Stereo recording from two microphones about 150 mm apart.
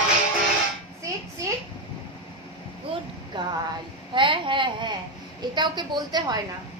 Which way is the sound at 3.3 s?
30° right (ahead or behind).